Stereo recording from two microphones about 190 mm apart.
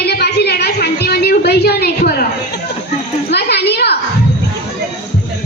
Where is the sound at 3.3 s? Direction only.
60° left (ahead or behind).